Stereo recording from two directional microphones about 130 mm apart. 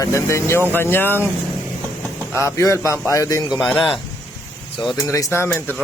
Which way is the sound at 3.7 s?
5° left (ahead or behind).